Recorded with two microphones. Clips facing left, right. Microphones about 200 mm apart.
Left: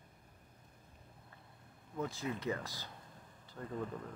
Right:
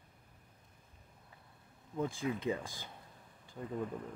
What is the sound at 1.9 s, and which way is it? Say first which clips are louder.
Speech: right 3 dB; 15° right (ahead or behind).